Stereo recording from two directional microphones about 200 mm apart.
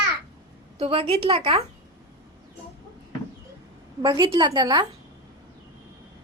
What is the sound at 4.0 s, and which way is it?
Speech, 20° right (ahead or behind).